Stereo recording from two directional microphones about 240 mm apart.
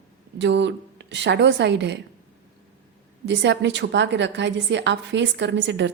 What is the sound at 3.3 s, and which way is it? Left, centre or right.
A woman's voice, right.